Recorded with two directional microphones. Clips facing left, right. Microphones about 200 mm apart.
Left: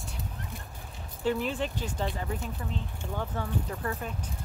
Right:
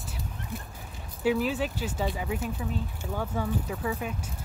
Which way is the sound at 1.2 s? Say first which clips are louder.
Right 3 dB; 5° right (ahead or behind).